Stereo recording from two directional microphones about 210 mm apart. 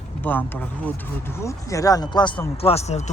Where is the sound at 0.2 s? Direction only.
10° left (ahead or behind).